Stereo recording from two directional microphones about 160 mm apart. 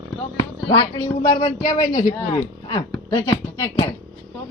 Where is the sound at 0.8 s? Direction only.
20° left (ahead or behind).